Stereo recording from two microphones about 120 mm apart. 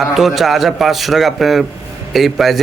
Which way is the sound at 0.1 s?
Centre (ahead or behind).